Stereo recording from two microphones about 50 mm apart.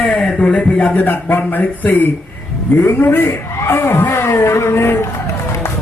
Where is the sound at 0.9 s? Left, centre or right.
Left.